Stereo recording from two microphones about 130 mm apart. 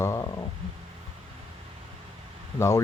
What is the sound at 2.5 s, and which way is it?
Speech, 20° left (ahead or behind).